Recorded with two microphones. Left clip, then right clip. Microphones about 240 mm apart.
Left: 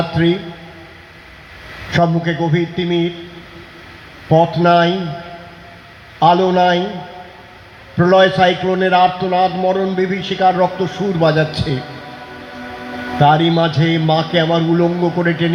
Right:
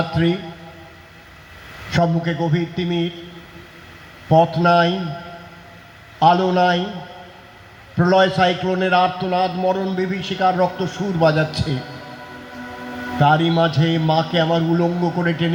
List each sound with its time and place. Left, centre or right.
0.1 s a man's voice: right
1.9 s a man's voice: right
4.3 s a man's voice: right
6.1 s a man's voice: right
7.9 s a man's voice: right
13.1 s a man's voice: right